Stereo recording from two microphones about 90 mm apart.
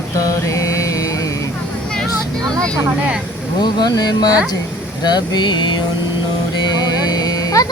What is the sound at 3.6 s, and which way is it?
Speech, 50° left (ahead or behind).